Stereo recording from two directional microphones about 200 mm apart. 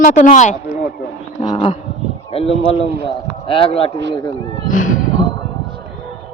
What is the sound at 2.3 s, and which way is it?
A man's voice, 30° left (ahead or behind).